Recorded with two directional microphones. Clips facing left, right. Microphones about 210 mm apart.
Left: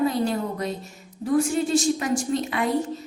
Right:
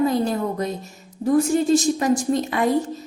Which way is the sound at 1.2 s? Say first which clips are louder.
Right 4 dB; 40° right (ahead or behind).